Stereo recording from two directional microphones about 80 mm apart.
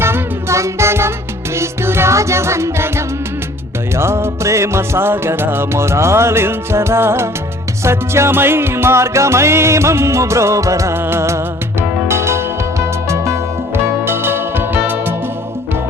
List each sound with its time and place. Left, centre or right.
0.0 s music: right
3.9 s music: right